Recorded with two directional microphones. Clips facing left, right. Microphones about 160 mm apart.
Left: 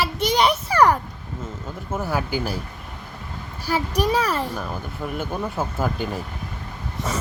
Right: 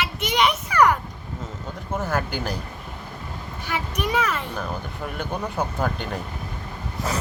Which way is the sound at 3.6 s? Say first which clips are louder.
Left 5 dB; 35° left (ahead or behind).